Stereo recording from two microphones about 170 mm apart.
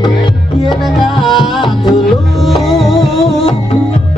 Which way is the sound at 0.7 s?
Centre (ahead or behind).